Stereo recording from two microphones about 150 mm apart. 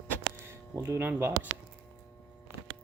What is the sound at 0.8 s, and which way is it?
Speech, 15° right (ahead or behind).